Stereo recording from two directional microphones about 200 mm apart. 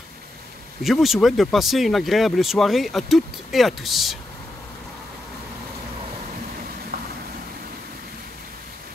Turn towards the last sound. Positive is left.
turn(degrees=-50)  # may be behind; listen again after turning